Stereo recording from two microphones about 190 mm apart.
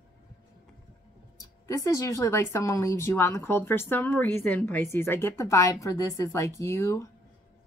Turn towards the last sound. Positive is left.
turn(degrees=15)  # may be behind; listen again after turning